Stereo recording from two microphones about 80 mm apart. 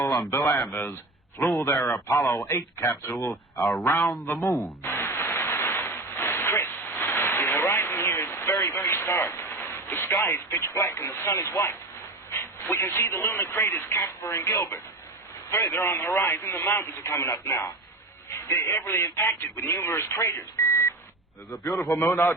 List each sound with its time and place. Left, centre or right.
0.4 s speech: centre
0.7 s a man's voice: left
4.3 s a sound: left
10.2 s speech: left
20.6 s beep: left
21.5 s a man's voice: left